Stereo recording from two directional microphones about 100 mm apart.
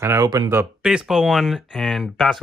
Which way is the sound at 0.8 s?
10° right (ahead or behind).